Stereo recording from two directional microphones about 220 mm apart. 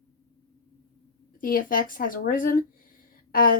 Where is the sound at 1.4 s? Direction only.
40° left (ahead or behind).